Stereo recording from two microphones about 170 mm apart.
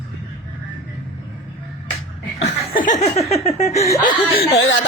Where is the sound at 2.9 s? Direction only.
40° left (ahead or behind).